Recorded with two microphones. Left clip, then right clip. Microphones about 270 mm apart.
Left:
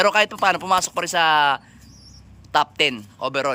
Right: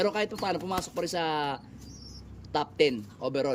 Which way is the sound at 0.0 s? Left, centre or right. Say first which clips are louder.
Left 11 dB; centre.